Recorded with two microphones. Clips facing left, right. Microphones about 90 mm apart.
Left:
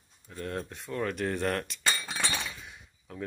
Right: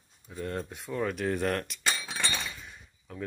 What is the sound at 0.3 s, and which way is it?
Cutlery, 5° right (ahead or behind).